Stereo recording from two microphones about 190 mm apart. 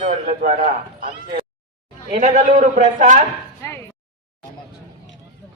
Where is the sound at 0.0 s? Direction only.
40° right (ahead or behind).